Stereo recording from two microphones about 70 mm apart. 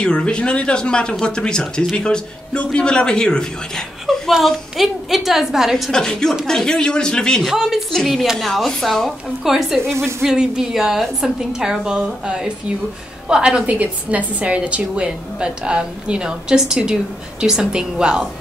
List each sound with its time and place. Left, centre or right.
0.0 s speech: centre
4.3 s a woman's voice: centre
5.9 s speech: centre
7.4 s a woman's voice: centre
9.8 s a sound: right
10.2 s a woman's voice: centre
13.7 s a woman's voice: right